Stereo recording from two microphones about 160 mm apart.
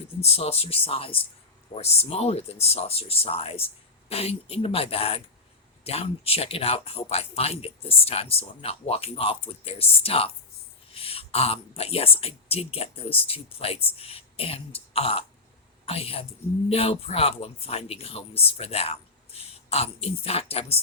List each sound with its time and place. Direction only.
0.2 s speech: 40° left (ahead or behind)